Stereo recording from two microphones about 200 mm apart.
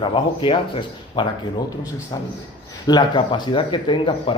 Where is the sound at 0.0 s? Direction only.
25° left (ahead or behind).